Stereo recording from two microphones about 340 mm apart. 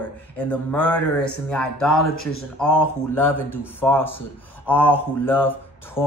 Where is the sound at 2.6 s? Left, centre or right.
Left.